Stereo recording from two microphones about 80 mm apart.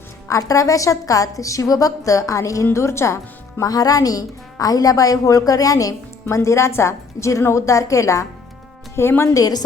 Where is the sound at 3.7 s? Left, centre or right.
Left.